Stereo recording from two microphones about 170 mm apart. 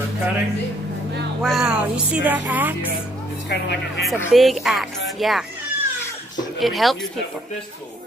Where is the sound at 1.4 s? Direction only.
Centre (ahead or behind).